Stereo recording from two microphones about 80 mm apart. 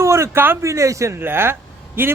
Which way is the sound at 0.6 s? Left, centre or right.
Right.